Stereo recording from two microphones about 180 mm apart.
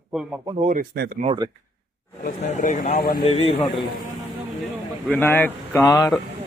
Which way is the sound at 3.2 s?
35° left (ahead or behind).